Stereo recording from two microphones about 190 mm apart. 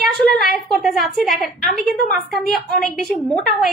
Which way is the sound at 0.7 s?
Centre (ahead or behind).